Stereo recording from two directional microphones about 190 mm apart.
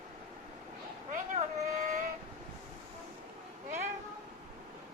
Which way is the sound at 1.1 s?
40° right (ahead or behind).